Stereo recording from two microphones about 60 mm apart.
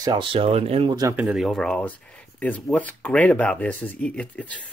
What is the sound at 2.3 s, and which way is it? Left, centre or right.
Speech, left.